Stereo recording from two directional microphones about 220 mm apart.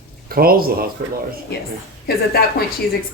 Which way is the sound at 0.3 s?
40° right (ahead or behind).